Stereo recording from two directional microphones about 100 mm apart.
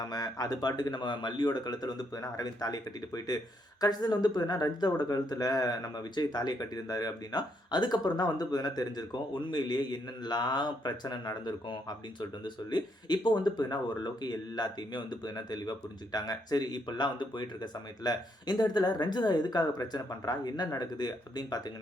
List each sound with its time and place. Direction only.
0.0 s speech: 40° left (ahead or behind)